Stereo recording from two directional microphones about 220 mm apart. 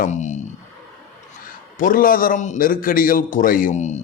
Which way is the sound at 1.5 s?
40° left (ahead or behind).